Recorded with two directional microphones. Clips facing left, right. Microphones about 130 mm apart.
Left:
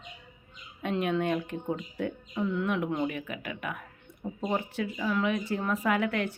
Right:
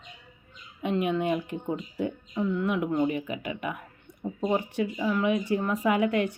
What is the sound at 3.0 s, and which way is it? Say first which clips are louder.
Speech: right 5 dB; 15° right (ahead or behind).